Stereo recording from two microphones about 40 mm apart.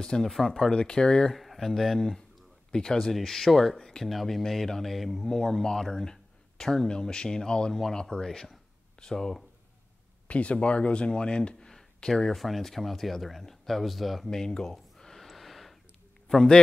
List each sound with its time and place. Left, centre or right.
0.2 s speech: centre
0.7 s speech: left
1.3 s speech: centre
3.1 s speech: centre
10.2 s speech: left; by 12.2 s centre
12.4 s speech: centre
14.3 s a sound: centre